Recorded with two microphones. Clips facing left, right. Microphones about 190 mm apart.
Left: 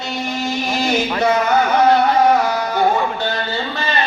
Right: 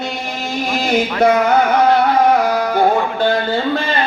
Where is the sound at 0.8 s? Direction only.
55° right (ahead or behind).